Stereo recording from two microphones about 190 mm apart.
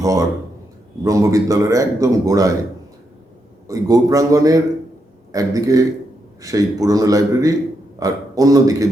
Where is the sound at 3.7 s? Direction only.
20° right (ahead or behind).